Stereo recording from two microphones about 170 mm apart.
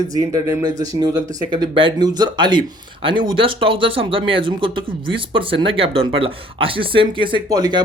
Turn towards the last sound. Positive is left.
turn(degrees=-20)  # may be behind; listen again after turning